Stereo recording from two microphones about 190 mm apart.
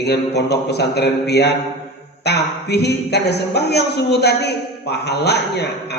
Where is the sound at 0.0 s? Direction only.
60° left (ahead or behind).